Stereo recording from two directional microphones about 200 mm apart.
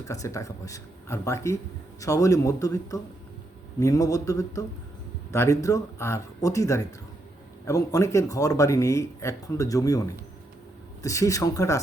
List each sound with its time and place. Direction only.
0.1 s speech: 15° left (ahead or behind)
11.0 s speech: 15° left (ahead or behind)